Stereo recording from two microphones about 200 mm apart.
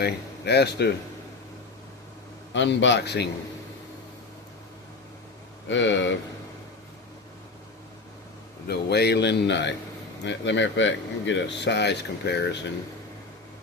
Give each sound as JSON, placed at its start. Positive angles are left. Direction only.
{"t": 0.0, "sound": "speech", "side_deg": 55}
{"t": 2.5, "sound": "speech", "side_deg": 65}
{"t": 5.6, "sound": "speech", "side_deg": 65}
{"t": 8.6, "sound": "speech", "side_deg": 55}